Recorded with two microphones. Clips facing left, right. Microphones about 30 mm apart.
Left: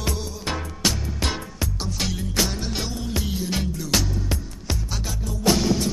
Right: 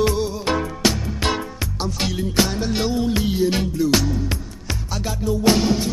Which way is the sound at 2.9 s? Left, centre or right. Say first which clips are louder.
Right 8 dB; right.